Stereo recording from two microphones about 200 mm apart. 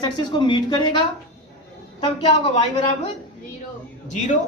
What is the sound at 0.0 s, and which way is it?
A woman's voice, 25° left (ahead or behind).